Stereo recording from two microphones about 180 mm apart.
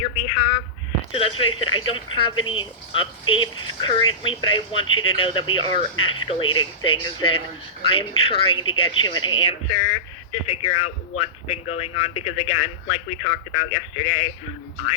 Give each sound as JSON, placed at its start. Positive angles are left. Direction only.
{"t": 1.1, "sound": "a man's voice", "side_deg": 30}